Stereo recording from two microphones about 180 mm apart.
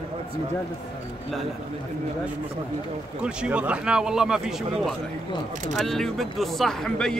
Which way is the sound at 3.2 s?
5° right (ahead or behind).